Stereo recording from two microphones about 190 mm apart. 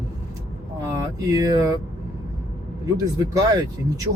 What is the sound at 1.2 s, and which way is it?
Speech, 20° right (ahead or behind).